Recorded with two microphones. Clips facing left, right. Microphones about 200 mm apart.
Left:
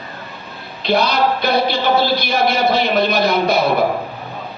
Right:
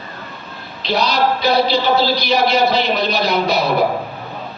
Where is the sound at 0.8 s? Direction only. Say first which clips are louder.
Left 1 dB; 55° left (ahead or behind).